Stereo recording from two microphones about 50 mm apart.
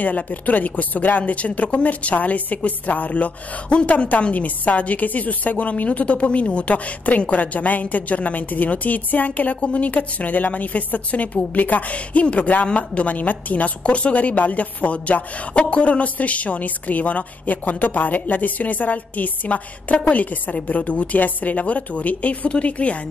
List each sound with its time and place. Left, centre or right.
0.0 s a woman's voice: left